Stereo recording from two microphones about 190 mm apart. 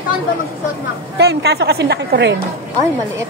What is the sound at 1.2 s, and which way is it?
Speech, 60° right (ahead or behind).